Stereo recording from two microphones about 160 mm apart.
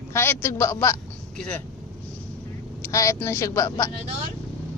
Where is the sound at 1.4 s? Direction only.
5° left (ahead or behind).